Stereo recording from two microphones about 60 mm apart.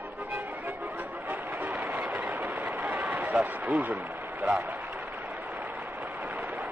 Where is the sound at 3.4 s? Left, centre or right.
Right.